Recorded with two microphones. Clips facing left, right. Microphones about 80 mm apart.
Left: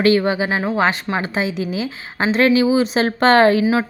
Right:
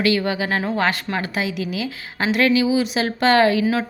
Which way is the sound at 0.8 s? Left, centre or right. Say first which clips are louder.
Left 3 dB; left.